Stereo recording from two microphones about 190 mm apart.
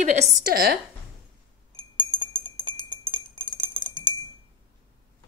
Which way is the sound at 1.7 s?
30° right (ahead or behind).